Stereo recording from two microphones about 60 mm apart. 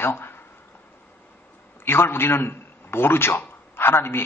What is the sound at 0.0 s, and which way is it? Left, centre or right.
Speech, left.